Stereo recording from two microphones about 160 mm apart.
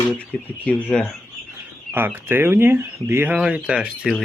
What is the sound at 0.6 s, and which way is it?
Speech, 10° left (ahead or behind).